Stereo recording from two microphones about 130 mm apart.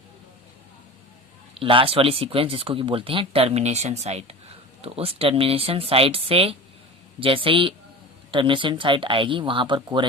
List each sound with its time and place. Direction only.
1.5 s speech: 45° right (ahead or behind)